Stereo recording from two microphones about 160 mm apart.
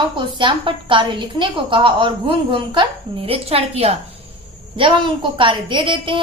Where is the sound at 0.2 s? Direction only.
30° right (ahead or behind).